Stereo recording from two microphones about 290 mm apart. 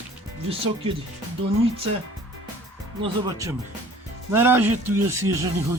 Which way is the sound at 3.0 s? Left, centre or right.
Centre.